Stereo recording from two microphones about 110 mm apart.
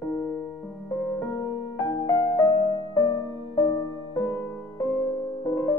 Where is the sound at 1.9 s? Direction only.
40° left (ahead or behind).